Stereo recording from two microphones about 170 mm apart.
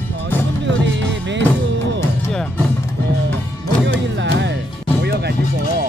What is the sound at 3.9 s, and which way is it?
Speech, 90° right.